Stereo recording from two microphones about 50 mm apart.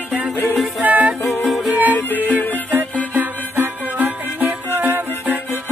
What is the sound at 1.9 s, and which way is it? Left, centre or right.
Music, left.